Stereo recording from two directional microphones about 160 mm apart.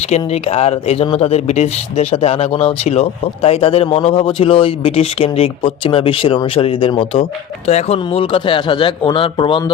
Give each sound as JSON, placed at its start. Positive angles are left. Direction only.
{"t": 0.1, "sound": "speech", "side_deg": 40}